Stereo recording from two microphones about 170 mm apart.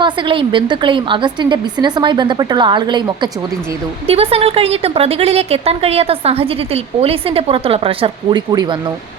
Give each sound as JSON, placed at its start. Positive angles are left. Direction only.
{"t": 0.0, "sound": "a woman's voice", "side_deg": -30}